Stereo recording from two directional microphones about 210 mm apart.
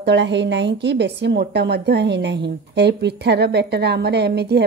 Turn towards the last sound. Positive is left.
turn(degrees=-50)  # may be behind; listen again after turning